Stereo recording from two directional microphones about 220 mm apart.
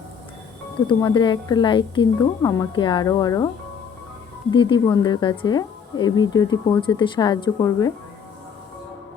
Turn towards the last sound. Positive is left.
turn(degrees=15)  # may be behind; listen again after turning